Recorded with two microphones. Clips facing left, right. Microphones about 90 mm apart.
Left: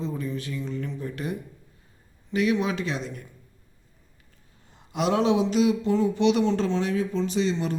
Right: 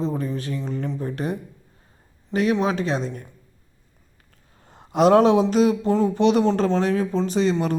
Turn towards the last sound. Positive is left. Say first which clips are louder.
# right 4 dB
turn(degrees=-50)  # may be behind; listen again after turning